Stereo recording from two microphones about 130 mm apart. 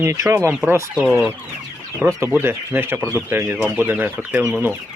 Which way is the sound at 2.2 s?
15° right (ahead or behind).